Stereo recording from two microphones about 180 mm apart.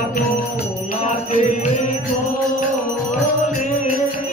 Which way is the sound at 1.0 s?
40° left (ahead or behind).